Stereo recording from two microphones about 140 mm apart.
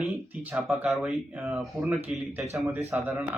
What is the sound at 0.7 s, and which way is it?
Speech, 15° right (ahead or behind).